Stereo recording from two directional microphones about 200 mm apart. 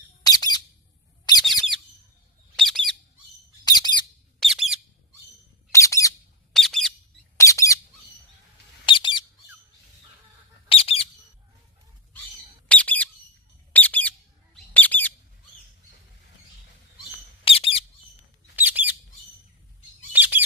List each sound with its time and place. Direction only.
0.2 s squawk: 20° left (ahead or behind)
1.3 s bird: 20° left (ahead or behind)
2.6 s squawk: centre (ahead or behind)
3.6 s bird: 20° left (ahead or behind)
4.4 s bird: centre (ahead or behind)
5.7 s bird: 15° left (ahead or behind)
6.5 s bird: centre (ahead or behind)
7.3 s squawk: 15° left (ahead or behind)
8.9 s squawk: 25° left (ahead or behind)
10.7 s bird: 30° left (ahead or behind)
12.6 s bird: 5° left (ahead or behind)
17.4 s a sound: 30° left (ahead or behind)
18.5 s bird: 10° right (ahead or behind)
20.1 s bird: 10° right (ahead or behind)